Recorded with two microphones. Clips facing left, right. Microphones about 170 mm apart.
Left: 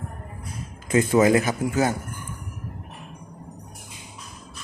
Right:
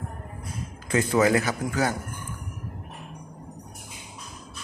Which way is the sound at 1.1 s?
15° left (ahead or behind).